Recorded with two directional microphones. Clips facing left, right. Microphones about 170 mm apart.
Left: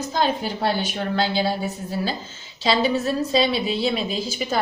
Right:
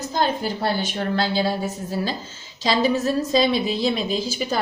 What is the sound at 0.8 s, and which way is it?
Speech, 40° right (ahead or behind).